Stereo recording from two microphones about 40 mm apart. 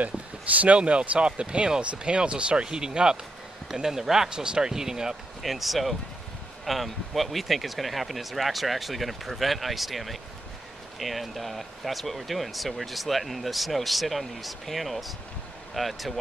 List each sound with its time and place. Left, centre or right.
0.7 s speech: right; by 5.1 s centre
5.4 s speech: centre